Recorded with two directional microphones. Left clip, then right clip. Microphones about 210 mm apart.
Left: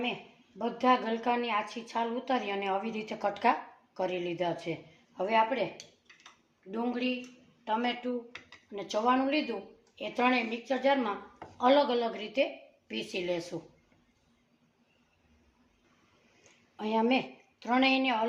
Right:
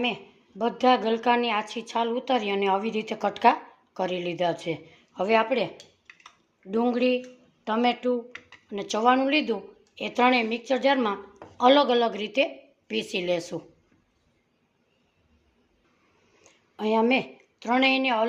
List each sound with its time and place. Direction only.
0.6 s a woman's voice: 45° right (ahead or behind)
6.7 s a woman's voice: 50° right (ahead or behind)
16.4 s a woman's voice: 30° right (ahead or behind)